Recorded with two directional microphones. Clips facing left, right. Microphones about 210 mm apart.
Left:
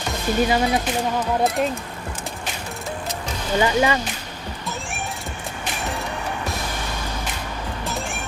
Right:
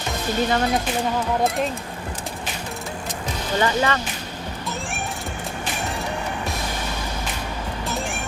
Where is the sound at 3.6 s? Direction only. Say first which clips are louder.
Left 2 dB; 10° left (ahead or behind).